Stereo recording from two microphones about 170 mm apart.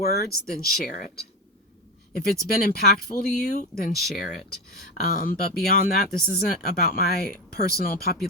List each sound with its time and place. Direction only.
0.0 s speech: 65° left (ahead or behind)
2.1 s speech: 65° left (ahead or behind); by 3.7 s 45° left (ahead or behind)
3.8 s speech: 65° left (ahead or behind)